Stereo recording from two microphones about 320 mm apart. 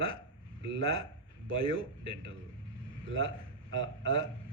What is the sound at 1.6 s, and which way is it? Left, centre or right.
Speech, centre.